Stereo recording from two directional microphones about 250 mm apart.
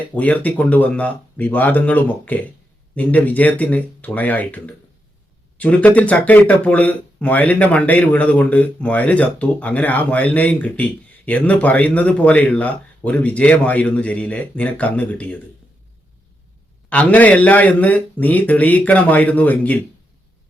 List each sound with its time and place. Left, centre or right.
0.1 s speech: centre
16.9 s speech: centre